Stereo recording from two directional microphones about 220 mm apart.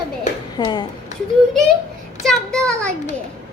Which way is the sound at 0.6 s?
20° left (ahead or behind).